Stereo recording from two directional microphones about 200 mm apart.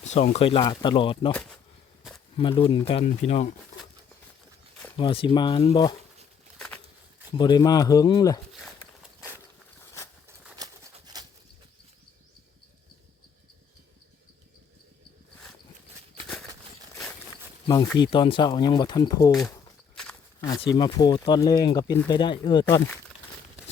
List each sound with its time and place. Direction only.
0.0 s speech: 35° left (ahead or behind)
1.3 s speech: 5° left (ahead or behind)
2.4 s speech: 25° left (ahead or behind)
4.9 s speech: 25° left (ahead or behind)
7.3 s speech: 20° left (ahead or behind)
10.6 s a sound: 20° right (ahead or behind)
17.9 s speech: 20° left (ahead or behind)
20.4 s speech: 20° left (ahead or behind)
22.6 s speech: 10° left (ahead or behind)